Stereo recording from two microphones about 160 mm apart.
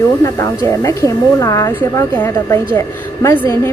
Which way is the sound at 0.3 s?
20° left (ahead or behind).